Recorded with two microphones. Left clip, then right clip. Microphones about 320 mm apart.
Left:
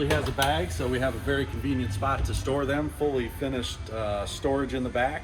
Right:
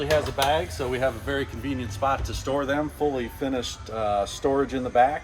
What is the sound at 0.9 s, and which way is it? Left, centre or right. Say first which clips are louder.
Speech: right 2 dB; centre.